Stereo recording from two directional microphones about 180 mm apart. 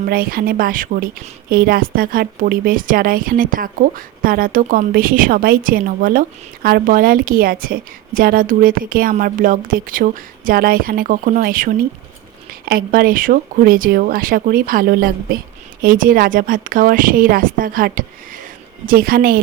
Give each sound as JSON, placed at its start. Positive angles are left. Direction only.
{"t": 0.0, "sound": "speech", "side_deg": -55}